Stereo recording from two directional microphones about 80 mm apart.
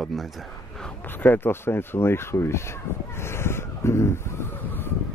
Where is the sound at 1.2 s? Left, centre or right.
Left.